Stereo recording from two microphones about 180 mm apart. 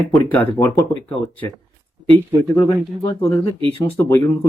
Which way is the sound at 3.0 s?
20° left (ahead or behind).